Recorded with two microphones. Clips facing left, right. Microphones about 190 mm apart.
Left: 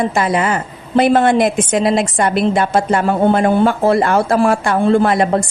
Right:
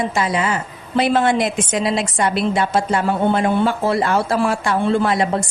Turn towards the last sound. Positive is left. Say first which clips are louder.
# left 5 dB
turn(degrees=55)  # may be behind; listen again after turning